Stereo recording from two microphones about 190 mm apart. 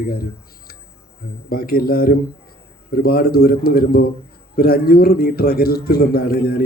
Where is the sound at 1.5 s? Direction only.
50° left (ahead or behind).